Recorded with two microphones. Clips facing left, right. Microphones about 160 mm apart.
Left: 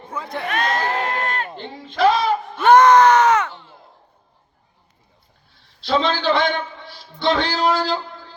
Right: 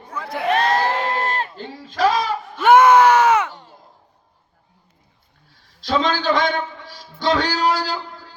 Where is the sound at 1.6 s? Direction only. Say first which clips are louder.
Left 3 dB; 40° right (ahead or behind).